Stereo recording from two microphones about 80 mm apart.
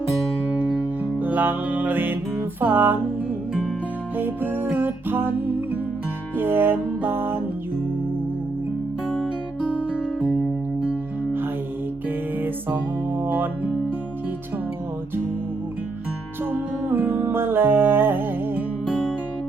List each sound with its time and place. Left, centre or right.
1.2 s music: right
4.2 s music: right
10.2 s music: centre
12.0 s music: right
16.5 s music: right